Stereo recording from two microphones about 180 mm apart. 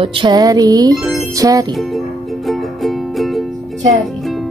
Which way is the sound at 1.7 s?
Centre (ahead or behind).